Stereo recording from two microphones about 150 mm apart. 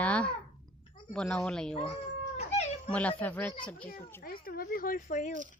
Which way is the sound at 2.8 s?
10° left (ahead or behind).